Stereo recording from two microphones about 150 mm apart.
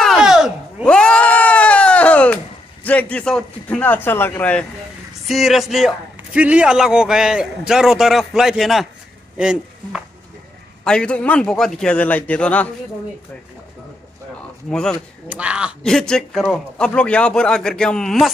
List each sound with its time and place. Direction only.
0.0 s a sound: centre (ahead or behind)
0.8 s bleat: 5° left (ahead or behind)
2.8 s a man's voice: 10° left (ahead or behind)
5.3 s a man's voice: centre (ahead or behind)
10.8 s a man's voice: 5° left (ahead or behind)
14.7 s a man's voice: 5° left (ahead or behind)
15.2 s speech: 10° right (ahead or behind)
15.8 s a man's voice: 5° left (ahead or behind)